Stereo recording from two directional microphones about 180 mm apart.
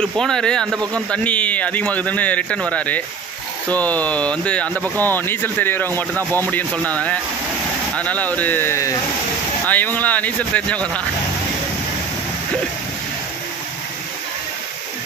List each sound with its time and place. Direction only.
0.0 s speech: 5° left (ahead or behind)
6.1 s speech: 15° right (ahead or behind)
6.9 s speech: 10° left (ahead or behind)